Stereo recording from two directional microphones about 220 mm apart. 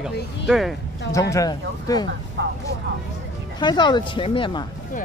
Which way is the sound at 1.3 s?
15° left (ahead or behind).